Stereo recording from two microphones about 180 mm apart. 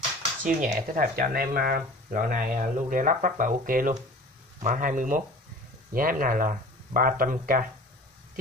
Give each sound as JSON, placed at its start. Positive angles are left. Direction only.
{"t": 0.4, "sound": "speech", "side_deg": -45}